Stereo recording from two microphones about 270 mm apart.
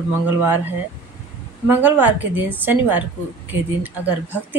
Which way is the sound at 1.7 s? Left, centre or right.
Centre.